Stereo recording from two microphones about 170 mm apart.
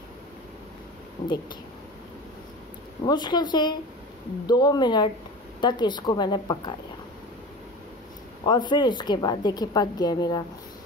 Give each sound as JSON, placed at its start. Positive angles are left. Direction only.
{"t": 1.2, "sound": "speech", "side_deg": 30}
{"t": 3.1, "sound": "a woman's voice", "side_deg": 25}
{"t": 8.5, "sound": "a woman's voice", "side_deg": 25}